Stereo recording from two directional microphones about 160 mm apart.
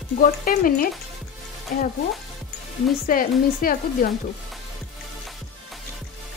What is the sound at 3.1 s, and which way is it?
Speech, 60° left (ahead or behind).